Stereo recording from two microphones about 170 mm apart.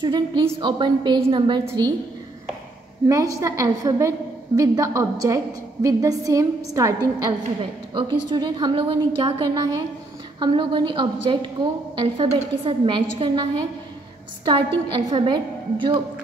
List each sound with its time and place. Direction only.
0.0 s a woman's voice: 25° right (ahead or behind)
3.1 s a woman's voice: 20° right (ahead or behind)